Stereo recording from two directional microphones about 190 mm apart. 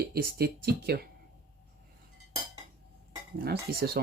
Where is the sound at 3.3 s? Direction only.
55° right (ahead or behind).